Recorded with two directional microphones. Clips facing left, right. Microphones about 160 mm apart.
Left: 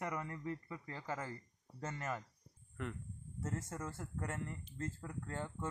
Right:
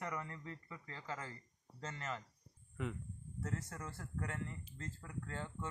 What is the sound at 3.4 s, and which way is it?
Speech, 20° left (ahead or behind).